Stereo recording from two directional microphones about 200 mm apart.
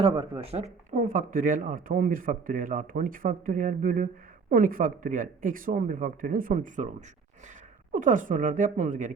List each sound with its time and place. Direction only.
0.0 s speech: 25° right (ahead or behind); by 6.8 s 40° right (ahead or behind)
7.9 s a woman's voice: 40° right (ahead or behind)